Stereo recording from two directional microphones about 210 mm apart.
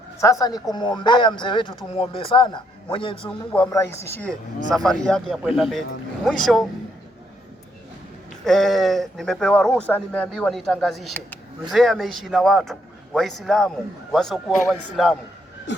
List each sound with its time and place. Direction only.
0.2 s speech: 15° left (ahead or behind)
3.7 s speech: 10° left (ahead or behind)
8.4 s speech: centre (ahead or behind)